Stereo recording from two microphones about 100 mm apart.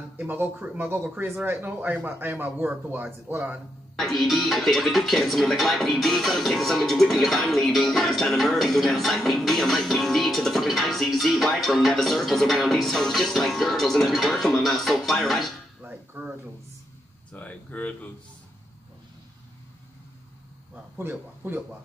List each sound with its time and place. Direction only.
0.2 s speech: 20° right (ahead or behind)
4.0 s speech: centre (ahead or behind)
15.8 s a sound: 20° right (ahead or behind)
17.3 s speech: 10° left (ahead or behind)
21.0 s speech: 20° right (ahead or behind)